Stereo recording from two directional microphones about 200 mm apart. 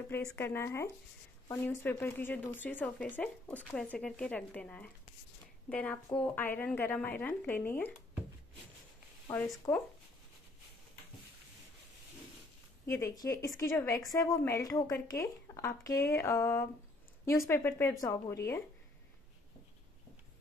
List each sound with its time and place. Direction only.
0.1 s a woman's voice: 10° left (ahead or behind)
9.3 s a woman's voice: 10° left (ahead or behind)
12.8 s a woman's voice: 15° left (ahead or behind)